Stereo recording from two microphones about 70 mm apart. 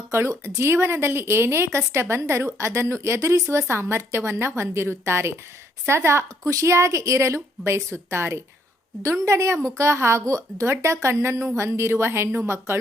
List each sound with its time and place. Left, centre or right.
0.1 s a woman's voice: right